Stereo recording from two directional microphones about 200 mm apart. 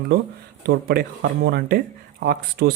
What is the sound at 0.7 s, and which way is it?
Speech, 50° right (ahead or behind).